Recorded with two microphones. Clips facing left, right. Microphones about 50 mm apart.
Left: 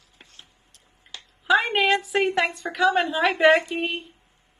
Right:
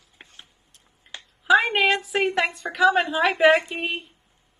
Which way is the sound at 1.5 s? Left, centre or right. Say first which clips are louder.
Right 1 dB; centre.